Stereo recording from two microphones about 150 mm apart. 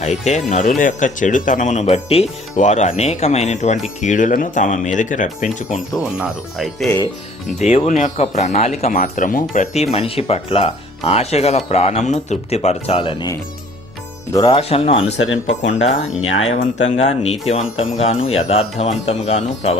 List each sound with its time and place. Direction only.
0.0 s speech: 50° left (ahead or behind)
6.0 s speech: 5° right (ahead or behind)
7.6 s speech: 45° left (ahead or behind)
8.9 s speech: 65° left (ahead or behind)
9.7 s speech: 45° left (ahead or behind)
13.0 s speech: 30° left (ahead or behind)
14.3 s speech: 25° left (ahead or behind)
14.6 s speech: 40° left (ahead or behind)